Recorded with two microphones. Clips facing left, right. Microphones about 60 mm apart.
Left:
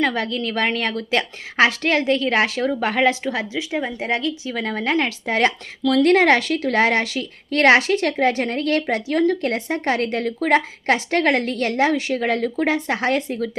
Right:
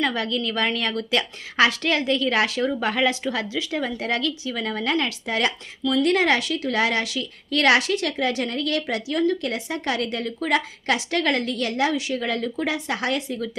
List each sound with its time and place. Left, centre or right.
0.0 s a woman's voice: left